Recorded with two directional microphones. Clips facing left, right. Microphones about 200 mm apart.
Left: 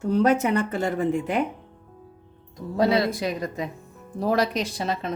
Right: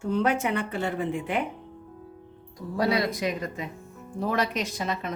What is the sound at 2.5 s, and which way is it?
Speech, 25° left (ahead or behind).